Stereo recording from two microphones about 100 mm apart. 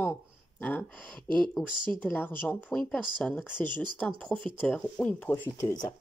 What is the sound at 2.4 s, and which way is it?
Speech, 20° left (ahead or behind).